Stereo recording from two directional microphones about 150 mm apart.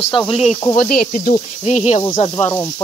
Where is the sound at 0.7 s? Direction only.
75° left (ahead or behind).